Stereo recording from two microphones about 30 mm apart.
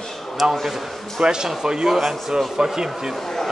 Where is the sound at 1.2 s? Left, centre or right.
Right.